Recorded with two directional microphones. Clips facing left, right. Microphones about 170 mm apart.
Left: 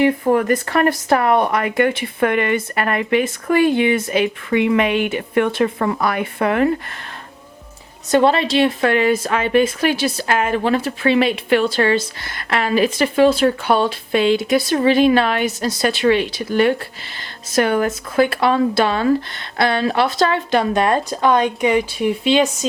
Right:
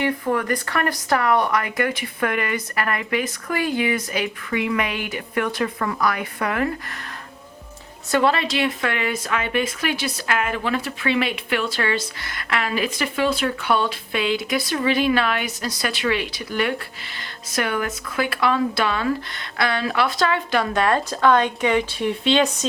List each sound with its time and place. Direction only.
0.0 s speech: 25° left (ahead or behind)
8.1 s a woman's voice: 25° left (ahead or behind); by 22.4 s 10° left (ahead or behind)